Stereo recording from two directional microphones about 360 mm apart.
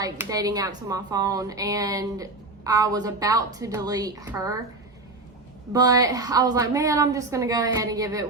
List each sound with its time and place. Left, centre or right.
0.0 s a woman's voice: centre
5.7 s a woman's voice: centre